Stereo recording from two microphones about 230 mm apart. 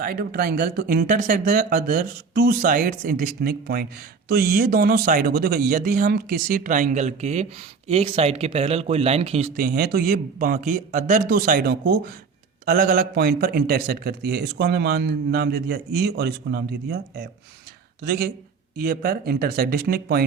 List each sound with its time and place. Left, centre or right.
0.0 s speech: right
9.6 s a man's voice: right